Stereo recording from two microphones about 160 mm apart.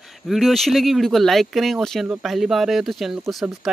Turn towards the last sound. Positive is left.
turn(degrees=0)  # may be behind; listen again after turning